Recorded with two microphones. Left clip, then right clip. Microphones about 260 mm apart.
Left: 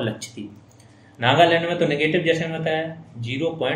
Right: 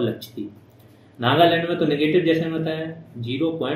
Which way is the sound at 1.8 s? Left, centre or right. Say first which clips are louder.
Right 4 dB; left.